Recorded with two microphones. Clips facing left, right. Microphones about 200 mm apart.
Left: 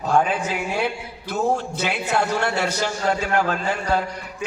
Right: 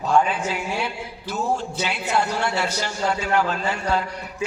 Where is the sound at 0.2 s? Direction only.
50° left (ahead or behind).